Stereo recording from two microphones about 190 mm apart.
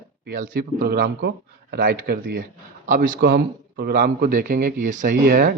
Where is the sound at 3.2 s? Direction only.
60° right (ahead or behind).